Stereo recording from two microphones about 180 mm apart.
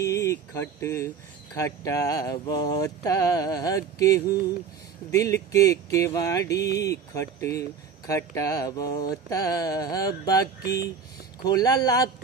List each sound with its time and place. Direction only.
0.0 s speech: 15° left (ahead or behind)
6.5 s speech: 70° left (ahead or behind)
6.8 s speech: 15° left (ahead or behind)